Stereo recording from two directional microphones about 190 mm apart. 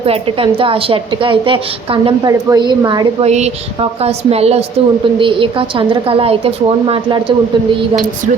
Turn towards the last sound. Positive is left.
turn(degrees=-25)  # may be behind; listen again after turning